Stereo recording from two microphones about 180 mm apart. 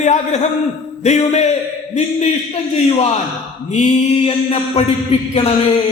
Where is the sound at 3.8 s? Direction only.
35° left (ahead or behind).